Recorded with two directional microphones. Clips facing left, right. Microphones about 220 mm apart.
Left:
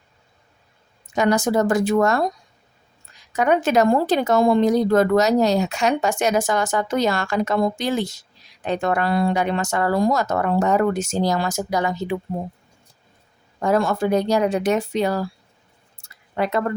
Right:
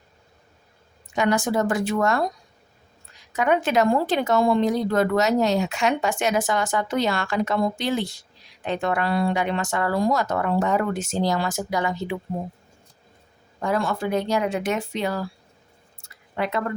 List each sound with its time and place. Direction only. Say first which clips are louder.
1.1 s speech: left 3 dB; 40° left (ahead or behind)
3.3 s speech: left 3 dB; 45° left (ahead or behind)
13.6 s speech: left 5 dB; 45° left (ahead or behind)
16.4 s speech: left 4 dB; 40° left (ahead or behind)